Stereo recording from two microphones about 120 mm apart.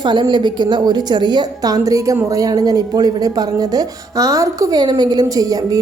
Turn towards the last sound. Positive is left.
turn(degrees=-30)  # may be behind; listen again after turning